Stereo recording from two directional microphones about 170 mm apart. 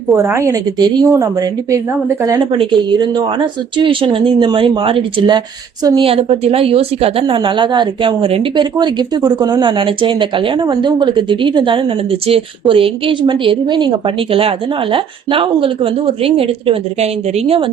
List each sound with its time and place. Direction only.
0.1 s a woman's voice: 15° right (ahead or behind)
2.5 s a woman's voice: 30° right (ahead or behind)
14.9 s a woman's voice: 30° right (ahead or behind)